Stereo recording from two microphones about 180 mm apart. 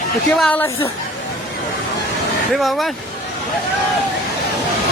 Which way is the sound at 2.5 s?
Centre (ahead or behind).